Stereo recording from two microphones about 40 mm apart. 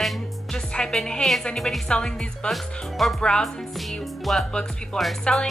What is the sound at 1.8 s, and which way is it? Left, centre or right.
Speech, left.